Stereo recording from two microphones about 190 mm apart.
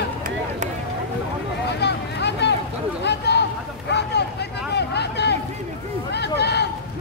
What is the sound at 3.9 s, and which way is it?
Vehicle, 65° left (ahead or behind).